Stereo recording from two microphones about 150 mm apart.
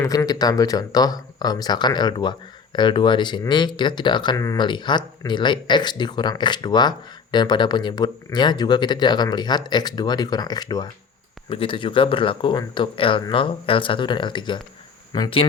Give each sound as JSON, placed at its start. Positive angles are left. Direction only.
{"t": 0.0, "sound": "speech", "side_deg": 20}
{"t": 11.4, "sound": "speech", "side_deg": 35}